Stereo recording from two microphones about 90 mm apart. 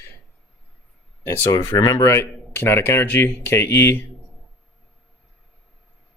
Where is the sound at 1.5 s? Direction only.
55° left (ahead or behind).